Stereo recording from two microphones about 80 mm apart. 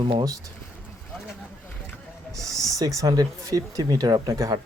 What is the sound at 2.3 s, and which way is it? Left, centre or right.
Speech, right.